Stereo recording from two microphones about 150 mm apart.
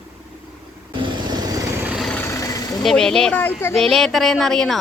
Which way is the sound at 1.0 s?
30° right (ahead or behind).